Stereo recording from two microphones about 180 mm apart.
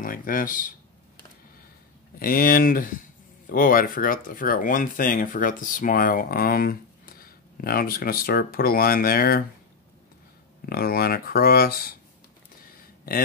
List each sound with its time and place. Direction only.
0.0 s speech: 50° left (ahead or behind)
2.1 s speech: 55° left (ahead or behind)
10.6 s speech: 55° left (ahead or behind)
12.6 s a sound: 55° left (ahead or behind)